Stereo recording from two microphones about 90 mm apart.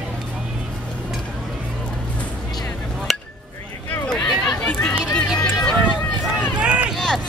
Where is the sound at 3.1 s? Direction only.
Centre (ahead or behind).